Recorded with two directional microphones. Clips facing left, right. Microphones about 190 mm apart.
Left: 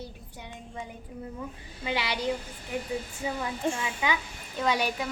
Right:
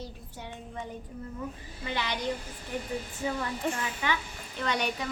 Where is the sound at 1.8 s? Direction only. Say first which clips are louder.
Left 2 dB; 10° left (ahead or behind).